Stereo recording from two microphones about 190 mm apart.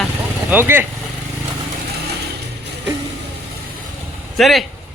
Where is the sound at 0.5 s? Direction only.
10° right (ahead or behind).